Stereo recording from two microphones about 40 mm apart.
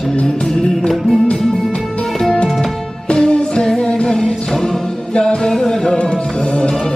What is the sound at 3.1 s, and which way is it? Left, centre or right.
Music, left.